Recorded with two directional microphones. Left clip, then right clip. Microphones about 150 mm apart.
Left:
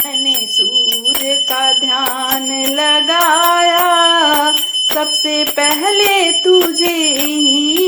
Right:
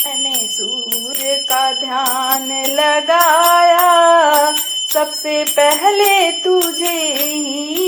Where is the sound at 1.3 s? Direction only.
30° left (ahead or behind).